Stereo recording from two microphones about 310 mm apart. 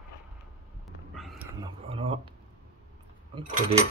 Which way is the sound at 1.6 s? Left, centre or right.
Centre.